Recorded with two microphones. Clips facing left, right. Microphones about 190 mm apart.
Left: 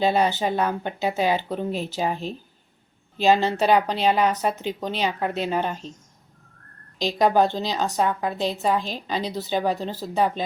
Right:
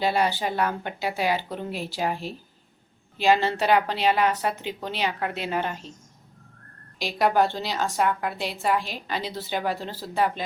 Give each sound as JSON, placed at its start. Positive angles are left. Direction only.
{"t": 0.0, "sound": "a woman's voice", "side_deg": 20}
{"t": 3.2, "sound": "a woman's voice", "side_deg": 20}
{"t": 7.0, "sound": "a woman's voice", "side_deg": 20}
{"t": 8.8, "sound": "a woman's voice", "side_deg": -10}
{"t": 9.0, "sound": "speech", "side_deg": 15}